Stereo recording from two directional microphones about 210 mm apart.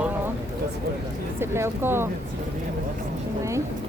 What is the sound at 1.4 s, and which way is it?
Speech, 10° right (ahead or behind).